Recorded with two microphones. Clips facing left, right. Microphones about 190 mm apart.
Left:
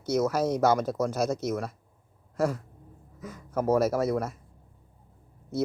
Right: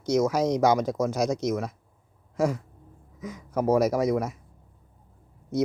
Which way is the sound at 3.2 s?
15° right (ahead or behind).